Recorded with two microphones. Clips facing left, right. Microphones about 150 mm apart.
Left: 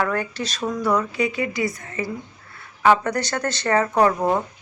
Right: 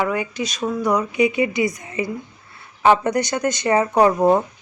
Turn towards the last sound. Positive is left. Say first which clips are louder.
# right 4 dB
turn(degrees=-20)  # may be behind; listen again after turning